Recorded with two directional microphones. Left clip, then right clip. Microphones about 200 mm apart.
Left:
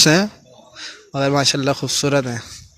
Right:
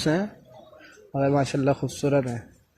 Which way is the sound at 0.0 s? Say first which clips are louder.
Left 11 dB; 25° left (ahead or behind).